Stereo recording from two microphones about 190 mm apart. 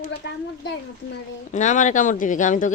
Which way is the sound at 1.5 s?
40° left (ahead or behind).